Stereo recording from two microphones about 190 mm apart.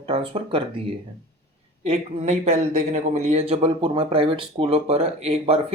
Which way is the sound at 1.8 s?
35° right (ahead or behind).